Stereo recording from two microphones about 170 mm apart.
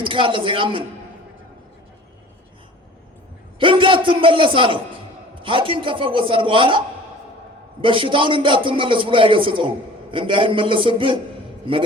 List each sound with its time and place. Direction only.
0.0 s a man's voice: 30° right (ahead or behind)
3.6 s a man's voice: 30° right (ahead or behind)